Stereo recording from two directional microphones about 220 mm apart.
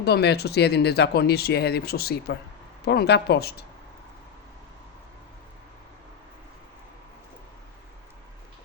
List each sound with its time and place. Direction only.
0.0 s speech: 50° left (ahead or behind)